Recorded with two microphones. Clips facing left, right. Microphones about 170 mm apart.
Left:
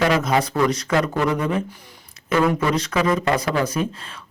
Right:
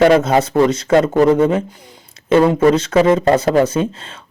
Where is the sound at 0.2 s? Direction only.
25° right (ahead or behind).